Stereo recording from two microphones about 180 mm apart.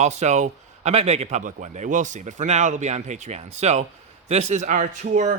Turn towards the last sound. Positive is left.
turn(degrees=-45)  # may be behind; listen again after turning